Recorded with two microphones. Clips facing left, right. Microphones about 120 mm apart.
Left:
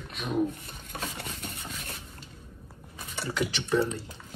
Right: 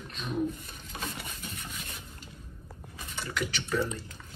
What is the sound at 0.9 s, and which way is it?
Stir, 60° left (ahead or behind).